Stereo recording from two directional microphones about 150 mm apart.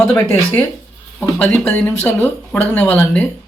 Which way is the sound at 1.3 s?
10° left (ahead or behind).